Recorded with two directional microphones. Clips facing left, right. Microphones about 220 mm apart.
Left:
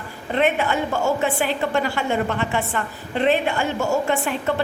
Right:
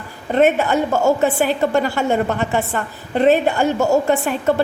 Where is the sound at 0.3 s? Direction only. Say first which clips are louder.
Right 5 dB; 40° right (ahead or behind).